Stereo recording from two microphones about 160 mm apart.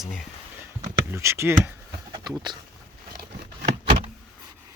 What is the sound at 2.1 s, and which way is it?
Speech, 25° right (ahead or behind).